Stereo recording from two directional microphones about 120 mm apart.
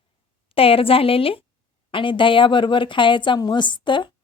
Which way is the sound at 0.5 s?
50° left (ahead or behind).